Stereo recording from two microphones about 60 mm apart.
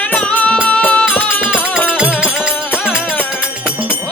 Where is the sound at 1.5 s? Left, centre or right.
Centre.